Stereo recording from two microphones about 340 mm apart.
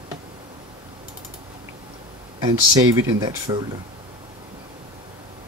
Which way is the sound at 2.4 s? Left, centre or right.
Centre.